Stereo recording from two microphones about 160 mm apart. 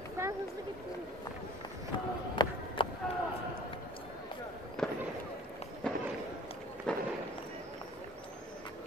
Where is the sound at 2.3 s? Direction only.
30° left (ahead or behind).